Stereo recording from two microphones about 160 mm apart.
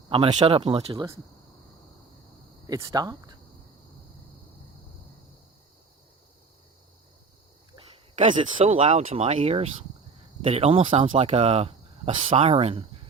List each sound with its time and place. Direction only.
0.1 s speech: 30° right (ahead or behind)
2.6 s speech: 25° right (ahead or behind)
8.3 s speech: 35° right (ahead or behind)